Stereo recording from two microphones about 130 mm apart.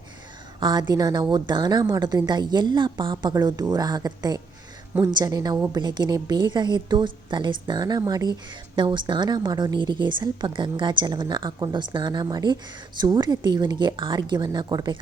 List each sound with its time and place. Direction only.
0.6 s a woman's voice: 35° right (ahead or behind)